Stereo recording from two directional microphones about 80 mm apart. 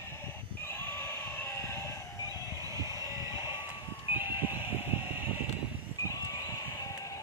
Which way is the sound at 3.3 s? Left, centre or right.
Left.